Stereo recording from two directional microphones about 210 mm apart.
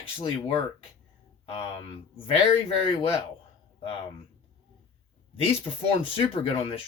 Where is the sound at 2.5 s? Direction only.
25° left (ahead or behind).